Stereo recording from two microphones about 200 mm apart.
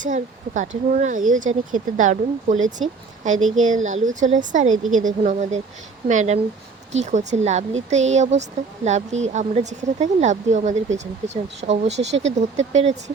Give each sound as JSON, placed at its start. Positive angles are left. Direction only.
{"t": 0.0, "sound": "speech", "side_deg": -40}